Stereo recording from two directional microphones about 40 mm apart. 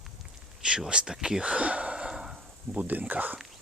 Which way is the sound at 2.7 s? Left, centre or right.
Right.